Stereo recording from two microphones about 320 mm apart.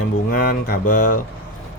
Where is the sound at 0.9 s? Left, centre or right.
Left.